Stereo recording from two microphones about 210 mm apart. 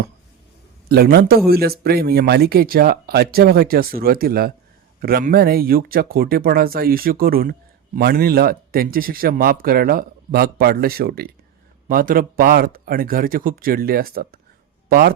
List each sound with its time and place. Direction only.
0.9 s speech: 50° right (ahead or behind)